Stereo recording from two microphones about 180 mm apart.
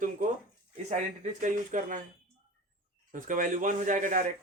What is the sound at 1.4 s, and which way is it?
Speech, 45° right (ahead or behind).